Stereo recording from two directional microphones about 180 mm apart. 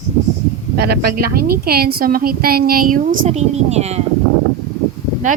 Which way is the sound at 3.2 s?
40° right (ahead or behind).